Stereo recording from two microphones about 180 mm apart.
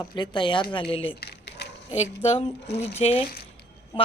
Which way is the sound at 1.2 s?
65° left (ahead or behind).